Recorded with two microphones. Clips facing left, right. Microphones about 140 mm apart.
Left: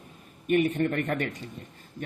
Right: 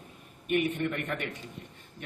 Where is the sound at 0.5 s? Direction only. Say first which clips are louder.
Left 5 dB; 40° left (ahead or behind).